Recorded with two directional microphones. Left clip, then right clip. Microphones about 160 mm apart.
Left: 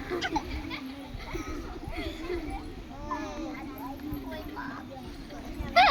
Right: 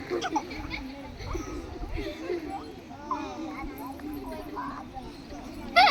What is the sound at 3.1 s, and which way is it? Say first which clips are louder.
Children playing: right 2 dB; 20° right (ahead or behind).